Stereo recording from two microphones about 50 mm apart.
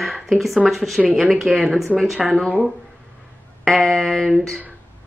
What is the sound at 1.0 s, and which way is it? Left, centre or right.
Speech, right.